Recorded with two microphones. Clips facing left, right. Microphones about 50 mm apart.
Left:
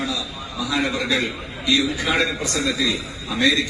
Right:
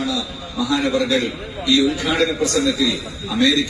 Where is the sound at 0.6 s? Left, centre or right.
Centre.